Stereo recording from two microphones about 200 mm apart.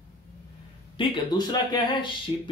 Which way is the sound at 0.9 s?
20° left (ahead or behind).